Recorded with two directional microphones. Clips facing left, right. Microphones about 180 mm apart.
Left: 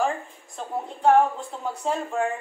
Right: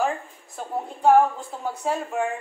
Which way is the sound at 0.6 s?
5° right (ahead or behind).